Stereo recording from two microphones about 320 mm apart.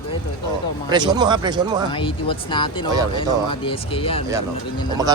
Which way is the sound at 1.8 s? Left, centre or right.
Centre.